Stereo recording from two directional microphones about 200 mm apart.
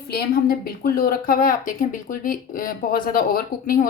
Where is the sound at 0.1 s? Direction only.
50° left (ahead or behind).